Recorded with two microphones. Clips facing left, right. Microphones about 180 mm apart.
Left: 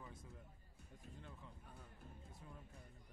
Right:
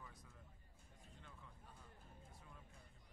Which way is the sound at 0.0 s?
25° left (ahead or behind).